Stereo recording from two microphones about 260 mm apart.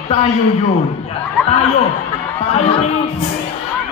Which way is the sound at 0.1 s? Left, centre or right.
Left.